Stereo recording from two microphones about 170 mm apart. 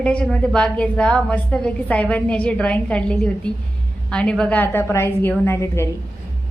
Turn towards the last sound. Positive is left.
turn(degrees=15)  # may be behind; listen again after turning